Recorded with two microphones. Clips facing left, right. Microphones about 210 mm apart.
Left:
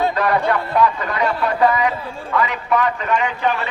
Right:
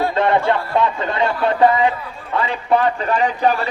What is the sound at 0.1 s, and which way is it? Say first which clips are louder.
A man's voice: right 2 dB; 25° right (ahead or behind).